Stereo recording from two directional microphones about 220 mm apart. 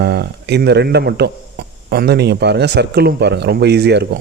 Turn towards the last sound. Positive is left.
turn(degrees=-50)  # may be behind; listen again after turning